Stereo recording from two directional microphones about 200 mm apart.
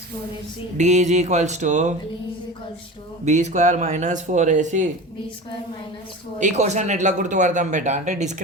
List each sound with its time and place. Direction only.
0.8 s a man's voice: 35° right (ahead or behind)
3.2 s a man's voice: 35° right (ahead or behind)
6.4 s a man's voice: 35° right (ahead or behind)